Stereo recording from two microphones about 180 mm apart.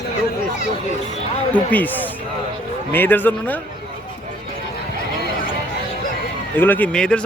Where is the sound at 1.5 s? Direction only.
10° left (ahead or behind).